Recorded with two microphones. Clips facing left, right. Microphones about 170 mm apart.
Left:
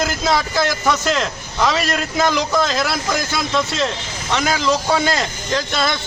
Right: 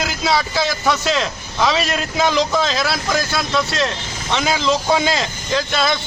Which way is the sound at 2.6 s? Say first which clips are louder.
Even; 10° left (ahead or behind).